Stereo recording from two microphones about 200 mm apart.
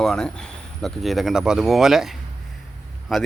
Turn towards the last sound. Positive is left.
turn(degrees=0)  # may be behind; listen again after turning